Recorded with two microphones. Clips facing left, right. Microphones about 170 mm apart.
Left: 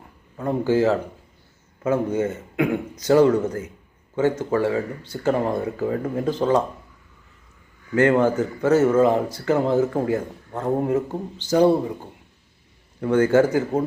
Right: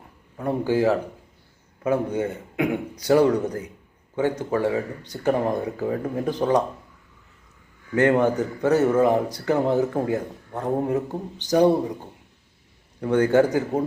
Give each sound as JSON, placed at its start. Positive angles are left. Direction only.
{"t": 0.3, "sound": "a man's voice", "side_deg": -15}
{"t": 7.9, "sound": "a man's voice", "side_deg": -20}
{"t": 13.0, "sound": "a man's voice", "side_deg": -20}